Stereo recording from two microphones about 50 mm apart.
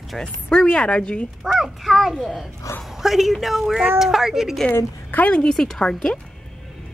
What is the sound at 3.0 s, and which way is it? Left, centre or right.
A child's voice, centre.